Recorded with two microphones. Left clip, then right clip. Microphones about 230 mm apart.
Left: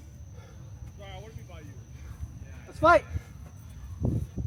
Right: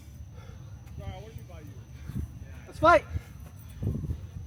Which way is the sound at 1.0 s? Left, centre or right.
Centre.